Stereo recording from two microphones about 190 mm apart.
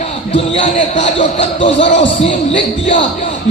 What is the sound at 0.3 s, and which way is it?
Speech, 40° left (ahead or behind).